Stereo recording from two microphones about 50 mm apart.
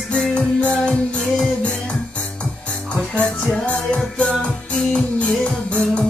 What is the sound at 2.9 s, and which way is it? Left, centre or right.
Music, left.